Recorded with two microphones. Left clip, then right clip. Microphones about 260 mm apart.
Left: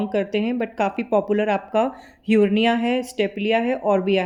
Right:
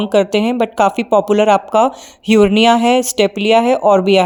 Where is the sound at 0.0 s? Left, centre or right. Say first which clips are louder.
Right 10 dB; right.